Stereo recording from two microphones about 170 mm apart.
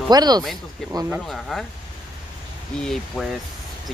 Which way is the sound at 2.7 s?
5° left (ahead or behind).